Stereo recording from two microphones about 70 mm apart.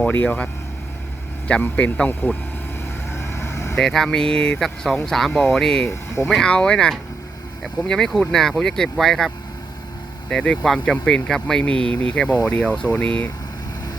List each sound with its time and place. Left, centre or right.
0.0 s a man's voice: left
1.6 s a man's voice: left
3.1 s vehicle: left
3.8 s speech: centre
10.2 s speech: centre
10.6 s speech: centre